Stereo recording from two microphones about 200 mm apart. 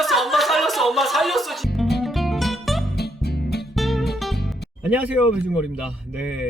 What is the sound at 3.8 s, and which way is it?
Music, centre (ahead or behind).